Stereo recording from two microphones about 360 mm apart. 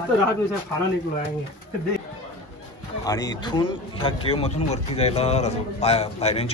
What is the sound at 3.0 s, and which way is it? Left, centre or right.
Speech, centre.